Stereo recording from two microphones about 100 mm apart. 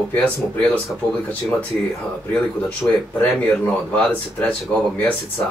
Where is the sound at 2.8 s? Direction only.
25° left (ahead or behind).